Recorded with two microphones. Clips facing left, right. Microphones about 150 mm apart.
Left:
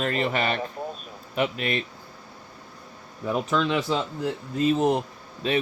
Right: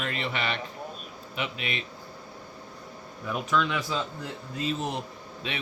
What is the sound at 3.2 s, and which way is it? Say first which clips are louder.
Speech: left 3 dB; 30° left (ahead or behind).